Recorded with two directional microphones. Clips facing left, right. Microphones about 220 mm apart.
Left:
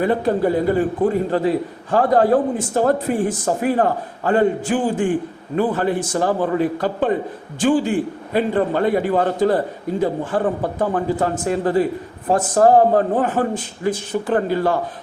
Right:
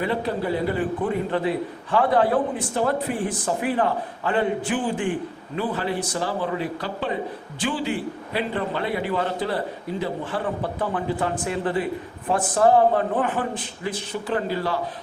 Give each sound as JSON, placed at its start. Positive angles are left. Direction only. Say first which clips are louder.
{"t": 0.0, "sound": "a man's voice", "louder": "left 7 dB", "side_deg": 45}